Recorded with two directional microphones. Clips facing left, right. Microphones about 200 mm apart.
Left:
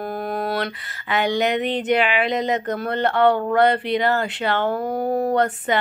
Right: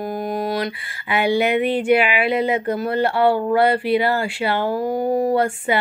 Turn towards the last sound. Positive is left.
turn(degrees=-10)  # may be behind; listen again after turning